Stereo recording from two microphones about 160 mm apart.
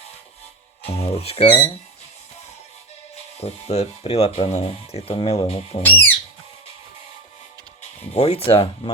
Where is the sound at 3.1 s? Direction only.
40° left (ahead or behind).